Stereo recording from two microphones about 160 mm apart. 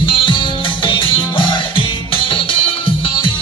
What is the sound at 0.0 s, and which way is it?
Music, 30° left (ahead or behind).